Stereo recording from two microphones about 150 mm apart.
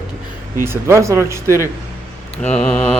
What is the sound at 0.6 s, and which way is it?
Speech, 15° right (ahead or behind).